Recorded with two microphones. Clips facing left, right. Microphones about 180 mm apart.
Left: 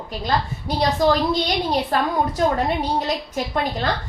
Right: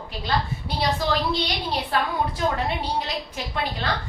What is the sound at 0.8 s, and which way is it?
A woman's voice, 45° left (ahead or behind).